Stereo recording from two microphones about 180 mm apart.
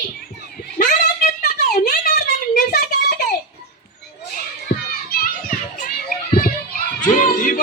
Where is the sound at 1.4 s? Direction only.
55° left (ahead or behind).